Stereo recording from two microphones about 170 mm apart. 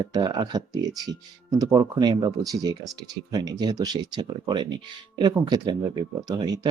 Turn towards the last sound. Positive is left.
turn(degrees=-20)  # may be behind; listen again after turning